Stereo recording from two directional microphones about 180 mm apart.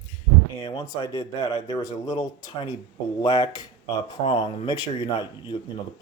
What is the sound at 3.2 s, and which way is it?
Speech, 35° left (ahead or behind).